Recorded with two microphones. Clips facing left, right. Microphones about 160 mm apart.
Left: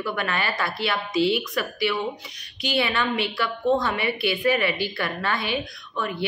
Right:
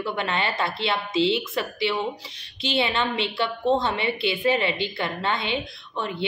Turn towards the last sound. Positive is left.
turn(degrees=-25)  # may be behind; listen again after turning